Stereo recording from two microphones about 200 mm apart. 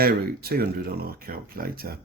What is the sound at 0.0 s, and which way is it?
Speech, 50° right (ahead or behind).